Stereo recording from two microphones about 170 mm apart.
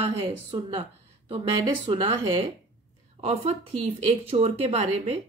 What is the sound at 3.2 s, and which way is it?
Speech, 35° right (ahead or behind).